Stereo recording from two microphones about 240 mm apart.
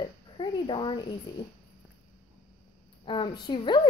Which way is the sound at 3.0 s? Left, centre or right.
Centre.